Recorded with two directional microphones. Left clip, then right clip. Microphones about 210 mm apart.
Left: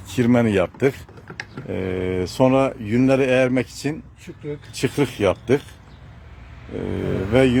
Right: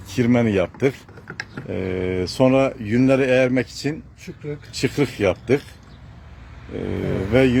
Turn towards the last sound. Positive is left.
turn(degrees=5)  # may be behind; listen again after turning